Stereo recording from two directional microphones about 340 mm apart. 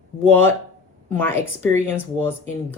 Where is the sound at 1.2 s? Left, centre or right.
Centre.